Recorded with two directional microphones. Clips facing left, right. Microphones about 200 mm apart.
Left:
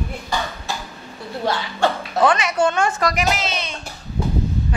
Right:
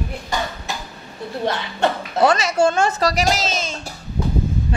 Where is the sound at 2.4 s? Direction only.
25° right (ahead or behind); by 3.7 s 45° right (ahead or behind).